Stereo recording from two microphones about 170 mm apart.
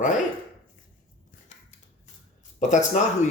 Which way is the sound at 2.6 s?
45° left (ahead or behind).